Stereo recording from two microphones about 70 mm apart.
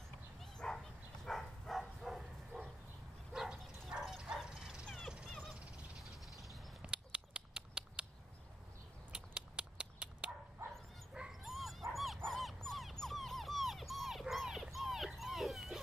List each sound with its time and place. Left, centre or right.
0.7 s bow-wow: centre
5.5 s fowl: centre
6.8 s a sound: centre
9.1 s dog: centre
11.1 s dog: centre